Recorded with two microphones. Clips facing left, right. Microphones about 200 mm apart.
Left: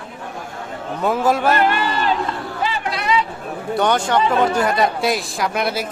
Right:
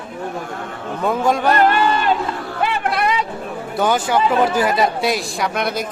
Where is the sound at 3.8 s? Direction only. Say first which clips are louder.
Even; 5° right (ahead or behind).